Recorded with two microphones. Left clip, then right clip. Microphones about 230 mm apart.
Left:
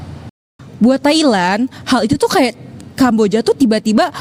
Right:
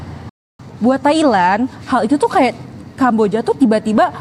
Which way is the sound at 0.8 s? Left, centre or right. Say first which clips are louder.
Left 1 dB; left.